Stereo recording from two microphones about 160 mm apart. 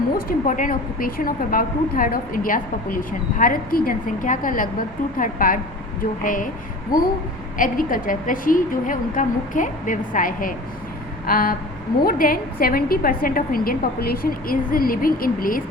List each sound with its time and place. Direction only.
0.3 s a woman's voice: 55° left (ahead or behind)
7.6 s a woman's voice: 60° left (ahead or behind)